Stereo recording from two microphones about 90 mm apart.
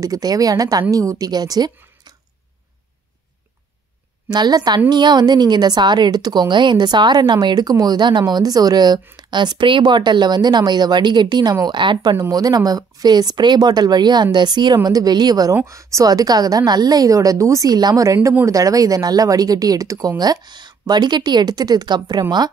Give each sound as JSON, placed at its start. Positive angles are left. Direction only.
{"t": 0.0, "sound": "a woman's voice", "side_deg": -45}
{"t": 4.3, "sound": "a woman's voice", "side_deg": -50}
{"t": 12.2, "sound": "a woman's voice", "side_deg": -45}
{"t": 15.5, "sound": "a woman's voice", "side_deg": -35}